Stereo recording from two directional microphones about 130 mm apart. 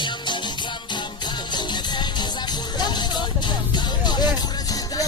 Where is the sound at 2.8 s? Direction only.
35° left (ahead or behind).